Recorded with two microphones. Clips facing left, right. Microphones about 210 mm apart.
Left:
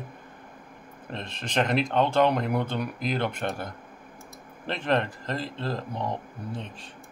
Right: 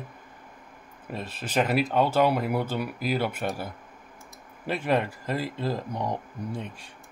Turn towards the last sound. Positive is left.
turn(degrees=-10)  # may be behind; listen again after turning